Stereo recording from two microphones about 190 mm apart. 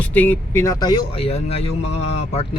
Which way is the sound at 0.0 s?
10° left (ahead or behind).